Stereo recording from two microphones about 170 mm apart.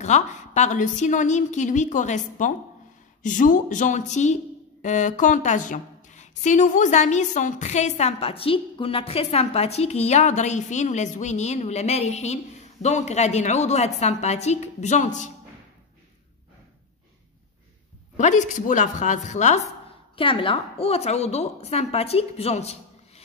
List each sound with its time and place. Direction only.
0.0 s a woman's voice: 45° left (ahead or behind)
18.1 s a woman's voice: 45° left (ahead or behind)
20.2 s a woman's voice: 30° left (ahead or behind)